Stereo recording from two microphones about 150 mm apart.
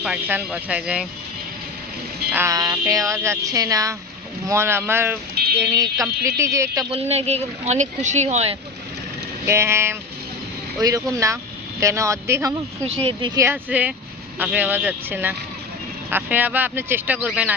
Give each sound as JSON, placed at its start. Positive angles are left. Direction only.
{"t": 0.0, "sound": "speech", "side_deg": -10}
{"t": 2.3, "sound": "speech", "side_deg": -20}
{"t": 6.9, "sound": "speech", "side_deg": -45}
{"t": 9.5, "sound": "speech", "side_deg": -15}